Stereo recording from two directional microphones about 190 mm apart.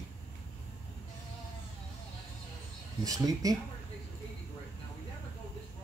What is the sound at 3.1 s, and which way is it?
Speech, 20° right (ahead or behind).